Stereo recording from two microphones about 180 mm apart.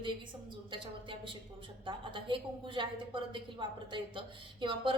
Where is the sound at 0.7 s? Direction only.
30° right (ahead or behind).